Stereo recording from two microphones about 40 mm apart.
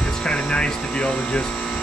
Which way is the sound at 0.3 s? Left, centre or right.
Left.